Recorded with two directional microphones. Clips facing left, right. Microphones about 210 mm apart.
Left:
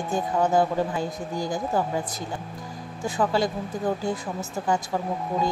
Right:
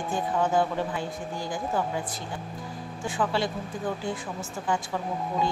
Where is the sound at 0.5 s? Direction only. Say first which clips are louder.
Left 3 dB; 40° left (ahead or behind).